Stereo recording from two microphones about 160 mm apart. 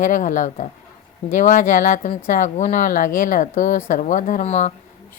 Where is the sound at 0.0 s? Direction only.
55° left (ahead or behind).